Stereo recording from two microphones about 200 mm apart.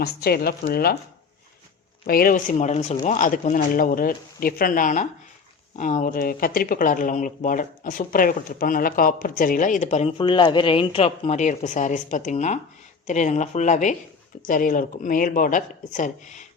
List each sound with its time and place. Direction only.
0.0 s speech: 50° left (ahead or behind)
2.0 s speech: 45° left (ahead or behind)